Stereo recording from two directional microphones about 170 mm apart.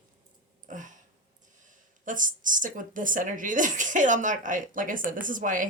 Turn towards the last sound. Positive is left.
turn(degrees=-50)  # may be behind; listen again after turning